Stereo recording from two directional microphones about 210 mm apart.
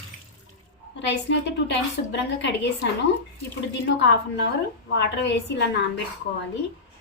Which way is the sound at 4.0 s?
55° left (ahead or behind).